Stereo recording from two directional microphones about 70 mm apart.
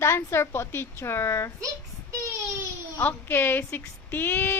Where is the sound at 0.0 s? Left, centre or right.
Left.